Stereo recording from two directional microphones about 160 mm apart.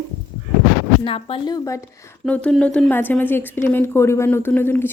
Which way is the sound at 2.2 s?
5° left (ahead or behind).